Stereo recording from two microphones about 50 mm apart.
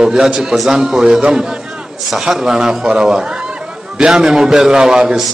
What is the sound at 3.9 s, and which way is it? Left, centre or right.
A man's voice, centre.